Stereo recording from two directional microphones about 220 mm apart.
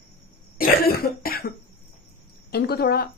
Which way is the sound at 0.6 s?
45° left (ahead or behind).